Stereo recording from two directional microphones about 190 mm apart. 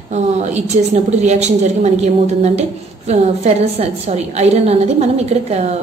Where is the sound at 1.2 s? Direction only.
35° right (ahead or behind).